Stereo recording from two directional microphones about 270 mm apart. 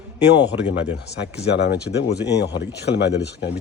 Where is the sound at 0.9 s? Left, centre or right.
Left.